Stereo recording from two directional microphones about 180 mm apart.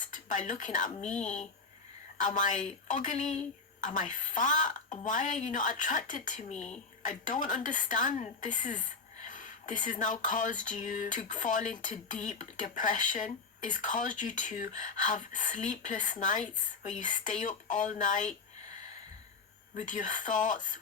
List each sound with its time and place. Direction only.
0.1 s speech: 45° left (ahead or behind)
2.1 s a woman's voice: 45° left (ahead or behind)
19.7 s a woman's voice: 45° left (ahead or behind)